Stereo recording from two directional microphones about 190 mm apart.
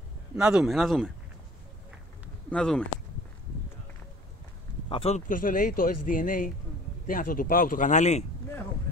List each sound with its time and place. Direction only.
0.4 s speech: 5° right (ahead or behind)
2.5 s speech: 5° left (ahead or behind)
4.8 s speech: 30° left (ahead or behind)